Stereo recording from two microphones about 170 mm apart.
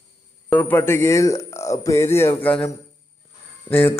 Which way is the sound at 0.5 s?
10° left (ahead or behind).